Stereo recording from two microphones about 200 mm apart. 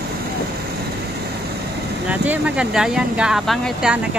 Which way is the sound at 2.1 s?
5° right (ahead or behind).